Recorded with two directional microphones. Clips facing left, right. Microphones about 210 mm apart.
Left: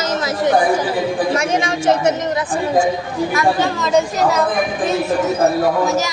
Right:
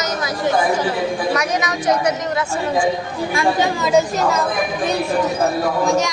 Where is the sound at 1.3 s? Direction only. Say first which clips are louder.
Left 2 dB; 25° left (ahead or behind).